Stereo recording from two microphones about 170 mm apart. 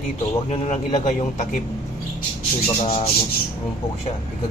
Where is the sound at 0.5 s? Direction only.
40° left (ahead or behind).